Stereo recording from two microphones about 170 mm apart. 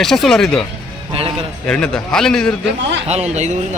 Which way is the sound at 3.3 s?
40° right (ahead or behind).